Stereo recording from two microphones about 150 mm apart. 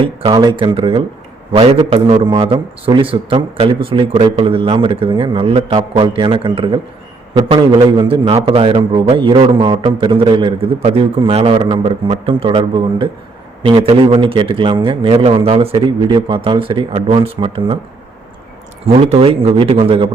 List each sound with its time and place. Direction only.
0.0 s speech: 35° right (ahead or behind)
18.9 s speech: 40° right (ahead or behind)